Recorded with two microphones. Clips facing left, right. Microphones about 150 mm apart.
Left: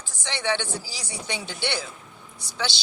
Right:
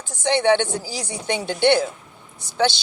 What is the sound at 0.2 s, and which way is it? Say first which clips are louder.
Speech: right 10 dB; 55° right (ahead or behind).